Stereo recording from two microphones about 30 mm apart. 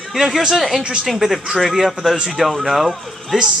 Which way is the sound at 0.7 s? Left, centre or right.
Right.